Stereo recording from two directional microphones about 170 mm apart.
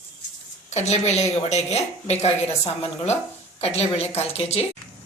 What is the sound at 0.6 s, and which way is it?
A woman's voice, 40° left (ahead or behind).